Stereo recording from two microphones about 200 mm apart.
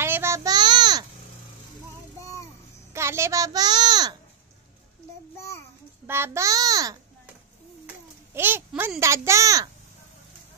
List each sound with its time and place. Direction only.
0.0 s child singing: 10° right (ahead or behind)
2.1 s music: 15° left (ahead or behind)
2.9 s a child's voice: 15° right (ahead or behind)
6.0 s a child's voice: 10° right (ahead or behind)
8.4 s a child's voice: 10° right (ahead or behind)